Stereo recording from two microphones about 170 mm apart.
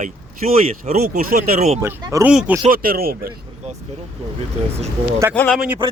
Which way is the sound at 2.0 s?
20° right (ahead or behind).